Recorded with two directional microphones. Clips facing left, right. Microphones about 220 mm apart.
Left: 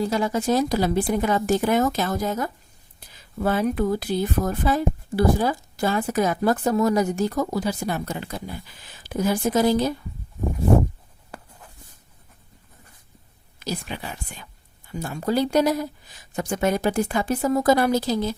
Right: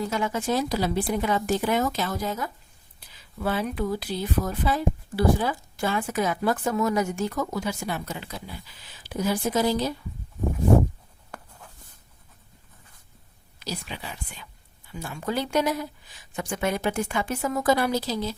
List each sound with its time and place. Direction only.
0.0 s a woman's voice: 35° left (ahead or behind)
13.6 s a woman's voice: 50° left (ahead or behind)